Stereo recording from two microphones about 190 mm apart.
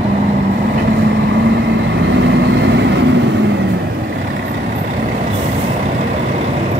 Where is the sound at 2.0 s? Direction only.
70° right (ahead or behind).